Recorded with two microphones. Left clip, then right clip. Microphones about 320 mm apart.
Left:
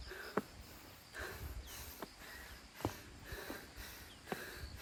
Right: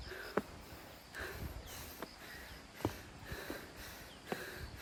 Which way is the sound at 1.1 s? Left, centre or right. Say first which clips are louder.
Right 2 dB; centre.